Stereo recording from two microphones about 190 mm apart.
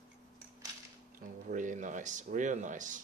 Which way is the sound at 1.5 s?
40° right (ahead or behind).